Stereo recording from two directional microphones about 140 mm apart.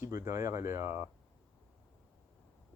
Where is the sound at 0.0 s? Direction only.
20° right (ahead or behind).